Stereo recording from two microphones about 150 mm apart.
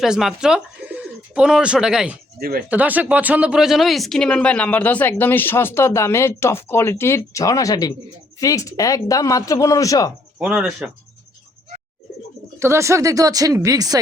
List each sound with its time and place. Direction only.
0.0 s speech: centre (ahead or behind)
2.4 s speech: 85° right
2.6 s speech: 10° right (ahead or behind); by 10.1 s 25° left (ahead or behind)
10.3 s speech: 5° right (ahead or behind)
12.5 s speech: 15° right (ahead or behind)